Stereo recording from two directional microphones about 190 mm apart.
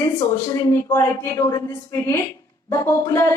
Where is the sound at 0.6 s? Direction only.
15° left (ahead or behind).